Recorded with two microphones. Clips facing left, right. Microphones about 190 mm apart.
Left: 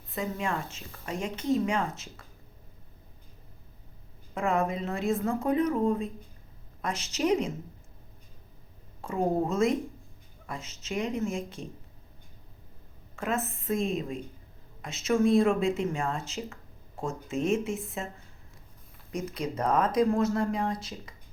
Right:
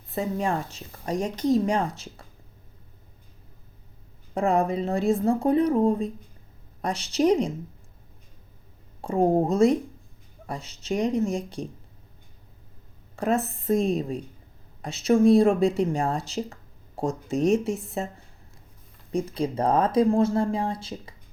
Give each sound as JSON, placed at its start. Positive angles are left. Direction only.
{"t": 0.1, "sound": "speech", "side_deg": -35}
{"t": 4.4, "sound": "speech", "side_deg": -35}
{"t": 9.0, "sound": "speech", "side_deg": -35}
{"t": 13.1, "sound": "speech", "side_deg": -35}
{"t": 19.1, "sound": "speech", "side_deg": -30}